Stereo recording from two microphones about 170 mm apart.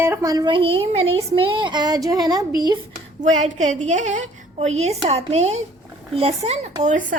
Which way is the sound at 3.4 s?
45° right (ahead or behind).